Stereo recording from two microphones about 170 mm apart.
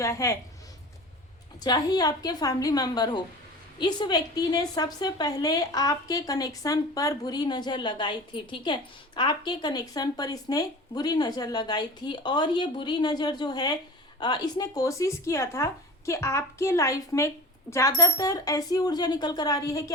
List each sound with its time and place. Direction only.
0.0 s a woman's voice: 15° left (ahead or behind)
1.6 s a woman's voice: 20° left (ahead or behind)